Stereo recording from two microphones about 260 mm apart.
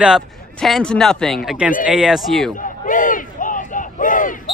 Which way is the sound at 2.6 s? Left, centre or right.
Left.